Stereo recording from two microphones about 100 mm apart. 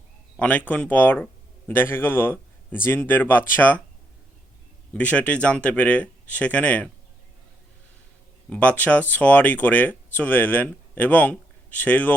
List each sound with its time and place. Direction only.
0.3 s a man's voice: 15° left (ahead or behind)
4.9 s speech: 15° left (ahead or behind)
8.4 s speech: 10° left (ahead or behind)